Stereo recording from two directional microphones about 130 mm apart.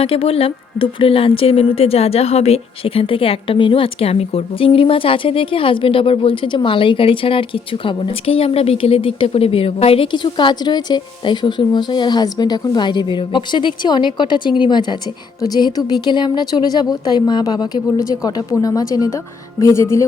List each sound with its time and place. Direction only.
0.0 s a woman's voice: 50° left (ahead or behind); by 20.1 s 20° left (ahead or behind)